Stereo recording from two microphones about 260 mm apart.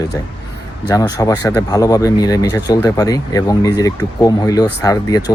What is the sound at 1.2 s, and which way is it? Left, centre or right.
Speech, centre.